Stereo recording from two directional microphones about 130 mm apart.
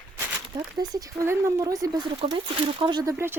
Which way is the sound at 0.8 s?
25° right (ahead or behind).